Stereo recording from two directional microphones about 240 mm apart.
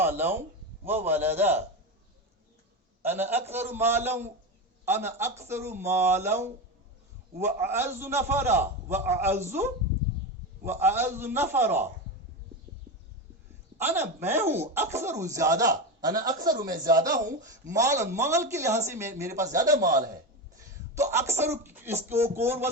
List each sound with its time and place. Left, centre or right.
0.0 s speech: centre
3.0 s speech: centre
13.7 s speech: centre